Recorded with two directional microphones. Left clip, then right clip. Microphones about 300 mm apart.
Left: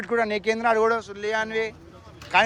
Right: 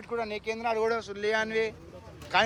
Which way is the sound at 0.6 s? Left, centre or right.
Centre.